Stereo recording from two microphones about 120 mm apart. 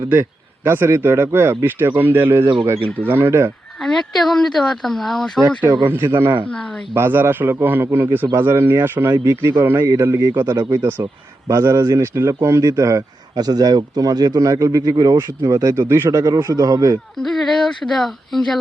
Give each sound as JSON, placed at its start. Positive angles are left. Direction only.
{"t": 0.1, "sound": "speech", "side_deg": -20}
{"t": 3.8, "sound": "speech", "side_deg": 0}
{"t": 5.9, "sound": "a man's voice", "side_deg": -20}
{"t": 10.8, "sound": "a man's voice", "side_deg": -20}
{"t": 17.2, "sound": "speech", "side_deg": 5}